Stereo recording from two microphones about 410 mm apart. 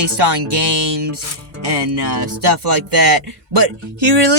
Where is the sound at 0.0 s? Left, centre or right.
Right.